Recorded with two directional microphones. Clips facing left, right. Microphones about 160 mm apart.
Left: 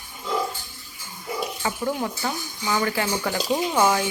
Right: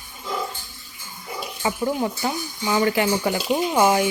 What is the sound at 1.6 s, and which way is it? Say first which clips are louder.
Speech: right 5 dB; 20° right (ahead or behind).